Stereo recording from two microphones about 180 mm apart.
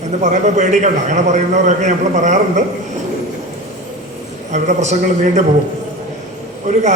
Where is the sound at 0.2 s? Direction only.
40° right (ahead or behind).